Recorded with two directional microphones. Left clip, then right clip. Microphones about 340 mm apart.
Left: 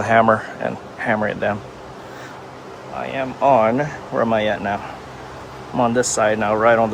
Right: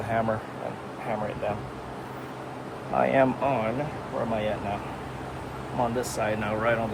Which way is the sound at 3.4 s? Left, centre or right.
Centre.